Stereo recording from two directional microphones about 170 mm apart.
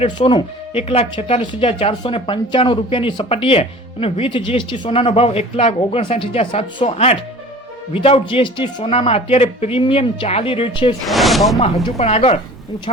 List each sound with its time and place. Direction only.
0.0 s speech: 30° left (ahead or behind)
11.0 s speech: centre (ahead or behind)
11.9 s speech: 40° left (ahead or behind)